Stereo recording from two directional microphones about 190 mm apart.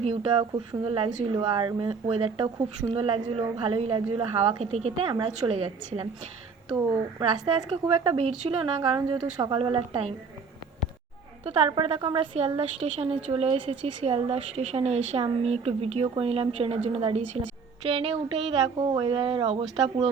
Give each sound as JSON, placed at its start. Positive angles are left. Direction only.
{"t": 0.0, "sound": "a woman's voice", "side_deg": -30}
{"t": 7.2, "sound": "speech", "side_deg": -25}
{"t": 11.4, "sound": "a woman's voice", "side_deg": -30}